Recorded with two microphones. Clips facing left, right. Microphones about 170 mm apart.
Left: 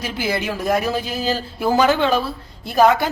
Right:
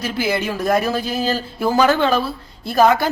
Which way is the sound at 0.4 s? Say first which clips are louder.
Even; 15° left (ahead or behind).